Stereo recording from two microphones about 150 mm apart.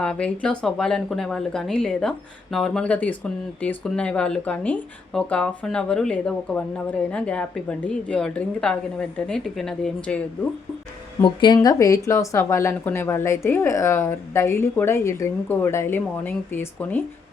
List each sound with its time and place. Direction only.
0.0 s speech: 5° left (ahead or behind)
11.2 s speech: 30° left (ahead or behind); by 17.0 s 15° left (ahead or behind)